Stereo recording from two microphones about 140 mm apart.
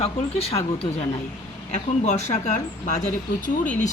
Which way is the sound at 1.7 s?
55° left (ahead or behind).